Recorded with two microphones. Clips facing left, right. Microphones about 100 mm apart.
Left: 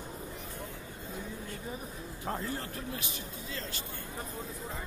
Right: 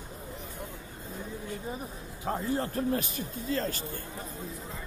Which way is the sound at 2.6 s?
40° right (ahead or behind).